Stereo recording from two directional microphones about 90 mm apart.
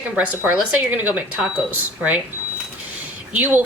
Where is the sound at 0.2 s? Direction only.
15° right (ahead or behind).